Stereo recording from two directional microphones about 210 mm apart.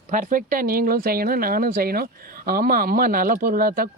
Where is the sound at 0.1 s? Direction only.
40° right (ahead or behind).